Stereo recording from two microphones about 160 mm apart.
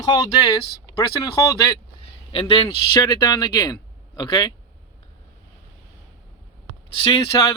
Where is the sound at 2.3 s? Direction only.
35° left (ahead or behind).